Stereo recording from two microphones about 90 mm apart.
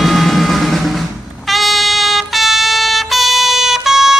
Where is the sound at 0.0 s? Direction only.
Centre (ahead or behind).